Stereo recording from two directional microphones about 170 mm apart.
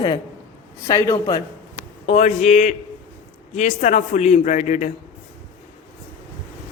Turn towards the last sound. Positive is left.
turn(degrees=45)  # may be behind; listen again after turning